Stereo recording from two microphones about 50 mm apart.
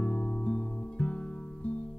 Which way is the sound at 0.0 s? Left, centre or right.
Left.